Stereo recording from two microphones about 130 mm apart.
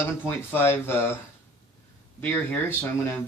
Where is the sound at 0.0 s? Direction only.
15° left (ahead or behind).